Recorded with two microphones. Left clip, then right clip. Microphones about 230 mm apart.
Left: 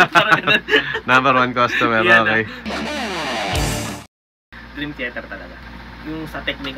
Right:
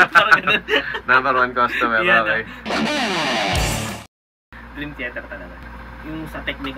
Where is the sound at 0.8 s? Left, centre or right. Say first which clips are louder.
Left 2 dB; left.